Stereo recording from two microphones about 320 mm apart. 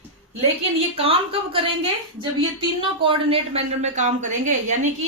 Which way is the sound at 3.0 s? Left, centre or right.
Centre.